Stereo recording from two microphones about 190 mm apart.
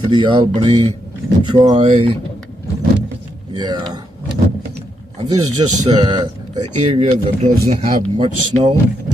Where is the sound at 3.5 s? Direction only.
20° right (ahead or behind).